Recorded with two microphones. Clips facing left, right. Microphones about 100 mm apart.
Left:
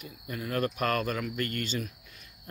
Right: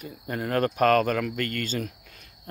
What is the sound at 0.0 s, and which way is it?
Speech, 55° right (ahead or behind).